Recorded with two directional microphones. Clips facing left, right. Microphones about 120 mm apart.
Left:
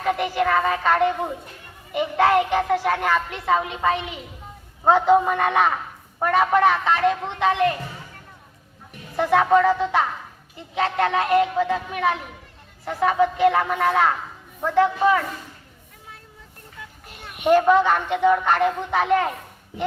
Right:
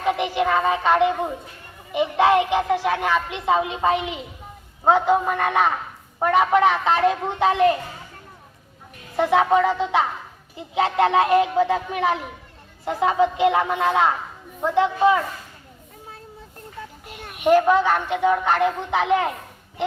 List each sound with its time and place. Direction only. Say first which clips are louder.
0.0 s a sound: even; 15° right (ahead or behind)
2.0 s speech: right 1 dB; 10° right (ahead or behind)
4.8 s speech: left 1 dB; 10° right (ahead or behind)
5.1 s speech: left 2 dB; centre (ahead or behind)
6.8 s speech: right 1 dB; 30° right (ahead or behind)
9.1 s speech: even; 15° right (ahead or behind)
10.8 s speech: right 3 dB; 25° right (ahead or behind)
17.4 s speech: even; 10° right (ahead or behind)